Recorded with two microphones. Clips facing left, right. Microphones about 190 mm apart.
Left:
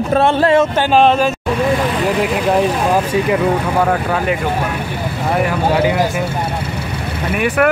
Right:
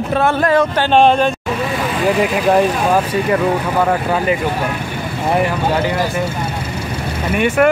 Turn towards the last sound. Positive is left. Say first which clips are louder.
# right 1 dB
turn(degrees=5)  # may be behind; listen again after turning